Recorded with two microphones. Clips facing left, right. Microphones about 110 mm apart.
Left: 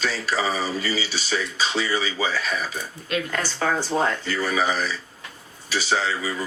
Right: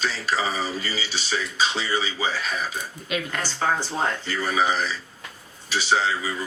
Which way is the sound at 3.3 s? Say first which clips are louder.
Even; 50° left (ahead or behind).